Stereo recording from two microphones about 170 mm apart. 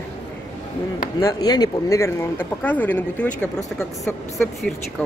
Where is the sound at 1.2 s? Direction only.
20° left (ahead or behind).